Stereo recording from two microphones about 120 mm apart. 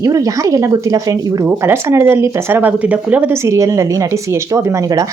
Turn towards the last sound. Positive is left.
turn(degrees=-30)  # may be behind; listen again after turning